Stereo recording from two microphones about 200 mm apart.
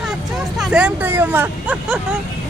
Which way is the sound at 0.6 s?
5° right (ahead or behind).